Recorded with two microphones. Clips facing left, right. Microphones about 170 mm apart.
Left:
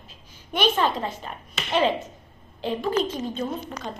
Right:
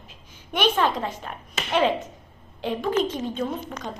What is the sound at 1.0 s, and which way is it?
Speech, 15° right (ahead or behind).